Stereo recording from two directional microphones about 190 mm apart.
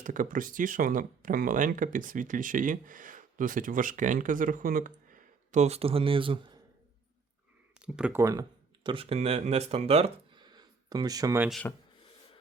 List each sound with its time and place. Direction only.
0.0 s speech: 45° right (ahead or behind); by 6.6 s 25° right (ahead or behind)
7.8 s speech: 5° right (ahead or behind)
8.2 s speech: 20° right (ahead or behind)
11.6 s speech: 10° left (ahead or behind)